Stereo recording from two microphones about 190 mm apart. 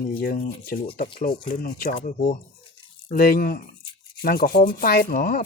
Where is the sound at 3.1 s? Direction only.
50° left (ahead or behind).